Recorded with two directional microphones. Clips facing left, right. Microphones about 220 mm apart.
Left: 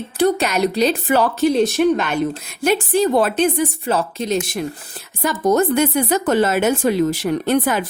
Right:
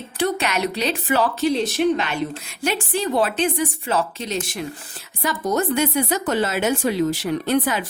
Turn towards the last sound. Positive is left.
turn(degrees=50)  # may be behind; listen again after turning